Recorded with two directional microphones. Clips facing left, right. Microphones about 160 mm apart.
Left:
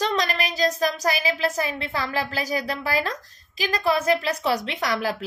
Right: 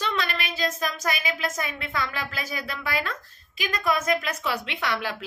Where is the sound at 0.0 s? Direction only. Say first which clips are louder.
Left 4 dB; 40° left (ahead or behind).